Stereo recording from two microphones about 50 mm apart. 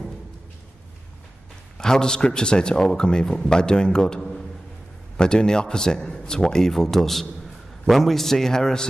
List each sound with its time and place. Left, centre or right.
1.8 s a man's voice: centre
4.2 s a sound: centre
5.1 s a man's voice: centre